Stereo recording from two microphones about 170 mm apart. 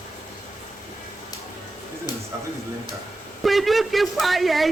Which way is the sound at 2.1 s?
25° left (ahead or behind).